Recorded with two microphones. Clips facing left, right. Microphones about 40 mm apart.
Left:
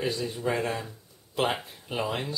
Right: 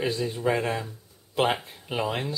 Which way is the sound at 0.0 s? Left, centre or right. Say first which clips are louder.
Right 3 dB; centre.